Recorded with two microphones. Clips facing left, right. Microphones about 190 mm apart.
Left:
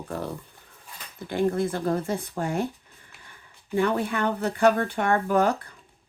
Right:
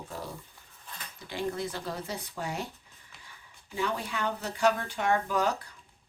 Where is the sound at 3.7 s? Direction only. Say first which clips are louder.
Left 8 dB; 55° left (ahead or behind).